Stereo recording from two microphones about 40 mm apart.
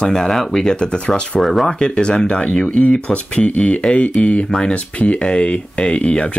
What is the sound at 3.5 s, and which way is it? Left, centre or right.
Speech, left.